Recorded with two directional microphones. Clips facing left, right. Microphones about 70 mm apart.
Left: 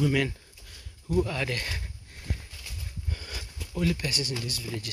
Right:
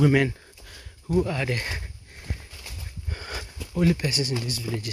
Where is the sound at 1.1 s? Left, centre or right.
Centre.